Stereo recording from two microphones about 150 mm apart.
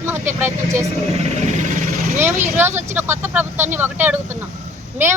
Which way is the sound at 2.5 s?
15° right (ahead or behind).